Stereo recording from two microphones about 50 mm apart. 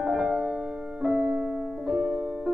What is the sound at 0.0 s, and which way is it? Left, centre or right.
Piano, centre.